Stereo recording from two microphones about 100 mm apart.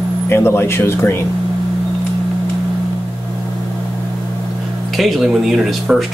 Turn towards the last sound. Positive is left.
turn(degrees=0)  # may be behind; listen again after turning